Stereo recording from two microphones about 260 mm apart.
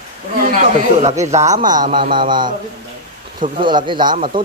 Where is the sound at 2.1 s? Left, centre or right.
Centre.